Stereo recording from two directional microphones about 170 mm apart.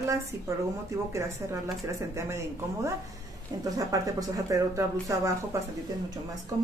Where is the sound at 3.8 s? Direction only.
20° right (ahead or behind).